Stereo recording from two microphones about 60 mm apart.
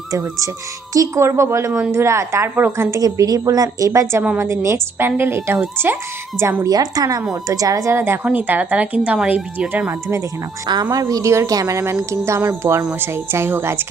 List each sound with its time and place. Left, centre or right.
0.1 s speech: right
0.9 s speech: right
3.0 s a woman's voice: right
5.0 s a woman's voice: right
6.7 s a woman's voice: right
7.4 s speech: right
7.9 s speech: right
8.2 s a woman's voice: right
9.8 s speech: right
10.9 s speech: right
11.3 s a woman's voice: right
11.6 s speech: right